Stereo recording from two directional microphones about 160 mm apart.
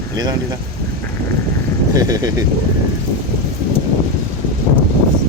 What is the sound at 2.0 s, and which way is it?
Speech, 25° right (ahead or behind).